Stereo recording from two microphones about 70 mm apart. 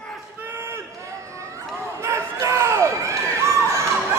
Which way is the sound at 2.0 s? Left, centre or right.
Right.